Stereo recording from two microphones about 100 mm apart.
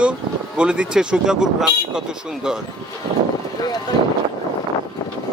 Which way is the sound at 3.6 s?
40° left (ahead or behind).